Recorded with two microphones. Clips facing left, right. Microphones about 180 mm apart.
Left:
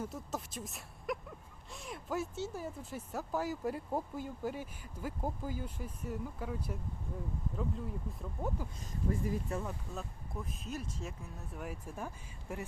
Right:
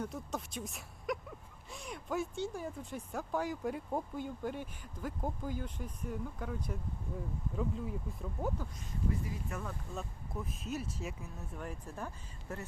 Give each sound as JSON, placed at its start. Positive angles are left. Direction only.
{"t": 0.0, "sound": "speech", "side_deg": 5}
{"t": 9.5, "sound": "speech", "side_deg": 20}
{"t": 9.9, "sound": "speech", "side_deg": 0}
{"t": 11.5, "sound": "speech", "side_deg": 5}